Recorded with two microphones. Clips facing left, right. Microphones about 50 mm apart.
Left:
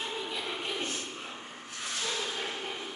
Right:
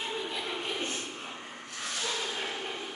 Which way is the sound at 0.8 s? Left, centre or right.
Right.